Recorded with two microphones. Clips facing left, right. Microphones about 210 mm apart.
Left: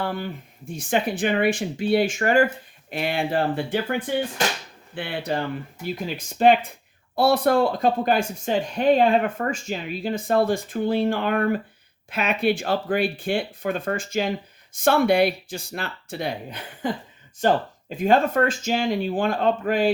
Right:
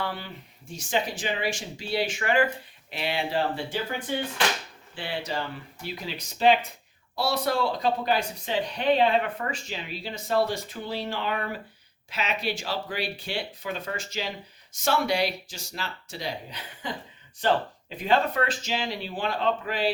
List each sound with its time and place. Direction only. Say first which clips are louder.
0.0 s speech: left 5 dB; 45° left (ahead or behind)